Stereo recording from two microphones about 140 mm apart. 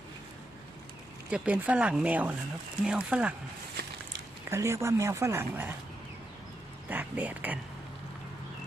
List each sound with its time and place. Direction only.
1.3 s speech: 10° right (ahead or behind)
4.5 s speech: 20° right (ahead or behind)
6.8 s speech: 10° right (ahead or behind)